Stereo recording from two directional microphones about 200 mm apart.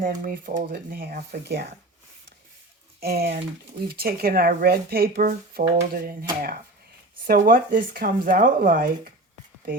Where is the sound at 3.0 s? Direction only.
50° right (ahead or behind).